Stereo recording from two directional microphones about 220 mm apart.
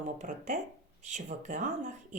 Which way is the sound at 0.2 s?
35° right (ahead or behind).